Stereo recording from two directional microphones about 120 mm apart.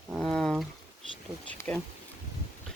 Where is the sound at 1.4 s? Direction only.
15° left (ahead or behind).